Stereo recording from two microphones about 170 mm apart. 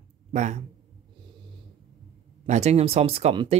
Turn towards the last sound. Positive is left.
turn(degrees=-35)  # may be behind; listen again after turning